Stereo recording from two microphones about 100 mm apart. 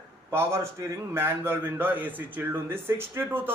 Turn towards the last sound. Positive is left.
turn(degrees=-20)  # may be behind; listen again after turning